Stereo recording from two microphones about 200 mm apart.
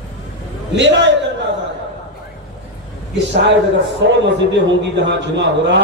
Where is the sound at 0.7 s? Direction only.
65° right (ahead or behind).